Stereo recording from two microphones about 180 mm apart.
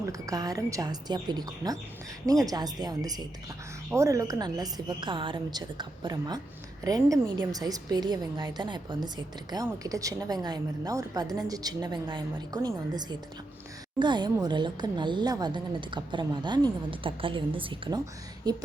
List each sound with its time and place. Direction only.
0.0 s a woman's voice: 20° right (ahead or behind)